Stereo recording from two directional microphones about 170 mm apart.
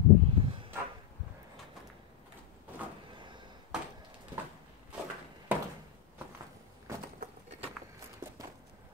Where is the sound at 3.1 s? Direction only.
25° right (ahead or behind).